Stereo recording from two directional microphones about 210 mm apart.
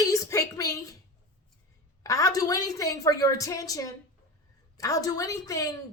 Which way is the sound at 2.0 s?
15° left (ahead or behind).